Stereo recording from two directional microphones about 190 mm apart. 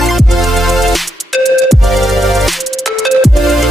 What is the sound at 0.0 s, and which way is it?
Music, centre (ahead or behind).